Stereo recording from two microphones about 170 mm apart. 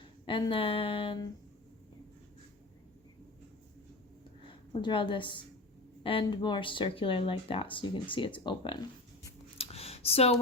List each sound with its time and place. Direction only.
0.3 s speech: 30° left (ahead or behind)
4.4 s a woman's voice: 30° left (ahead or behind)
9.6 s a sound: 35° left (ahead or behind)